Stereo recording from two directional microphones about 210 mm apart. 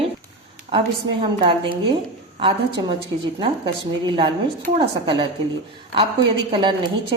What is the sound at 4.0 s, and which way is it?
Speech, 25° right (ahead or behind).